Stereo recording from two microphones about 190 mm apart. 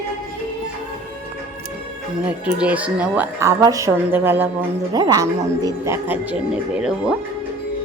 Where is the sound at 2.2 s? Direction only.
5° right (ahead or behind).